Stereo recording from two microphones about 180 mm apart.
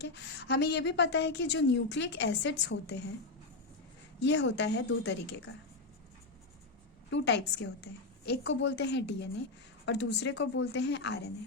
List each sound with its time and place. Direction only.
0.0 s a woman's voice: 75° left (ahead or behind)
4.2 s a woman's voice: 75° left (ahead or behind)
7.1 s a woman's voice: 75° left (ahead or behind)